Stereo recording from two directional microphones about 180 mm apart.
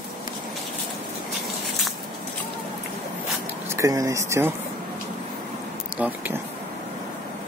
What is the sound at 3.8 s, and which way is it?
Speech, 15° right (ahead or behind).